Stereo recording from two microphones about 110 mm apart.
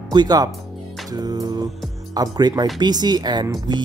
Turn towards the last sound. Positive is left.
turn(degrees=-45)  # may be behind; listen again after turning